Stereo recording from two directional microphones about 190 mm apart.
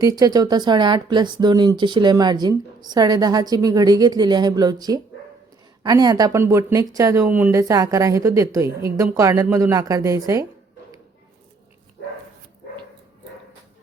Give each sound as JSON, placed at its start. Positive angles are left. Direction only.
{"t": 0.0, "sound": "speech", "side_deg": -20}